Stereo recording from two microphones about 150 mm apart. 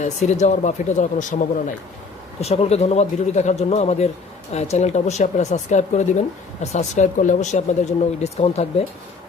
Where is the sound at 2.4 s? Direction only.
45° left (ahead or behind).